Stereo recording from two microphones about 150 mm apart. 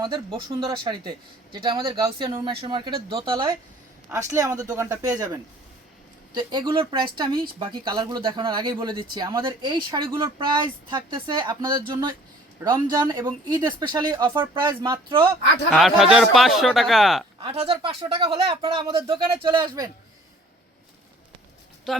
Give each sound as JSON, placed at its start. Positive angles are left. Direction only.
{"t": 0.0, "sound": "speech", "side_deg": -30}
{"t": 4.1, "sound": "speech", "side_deg": -20}
{"t": 15.7, "sound": "speech", "side_deg": 0}
{"t": 17.4, "sound": "speech", "side_deg": -40}
{"t": 21.9, "sound": "speech", "side_deg": 0}